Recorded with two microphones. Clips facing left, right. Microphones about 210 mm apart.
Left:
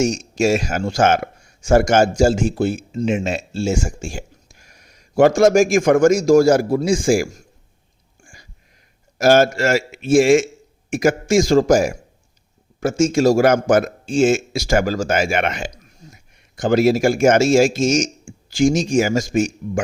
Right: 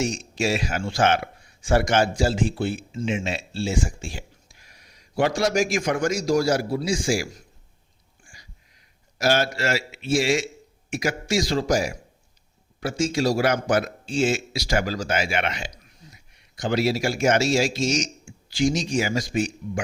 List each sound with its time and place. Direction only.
0.0 s speech: 45° left (ahead or behind)
8.2 s a sound: 50° left (ahead or behind)
9.1 s a man's voice: 50° left (ahead or behind)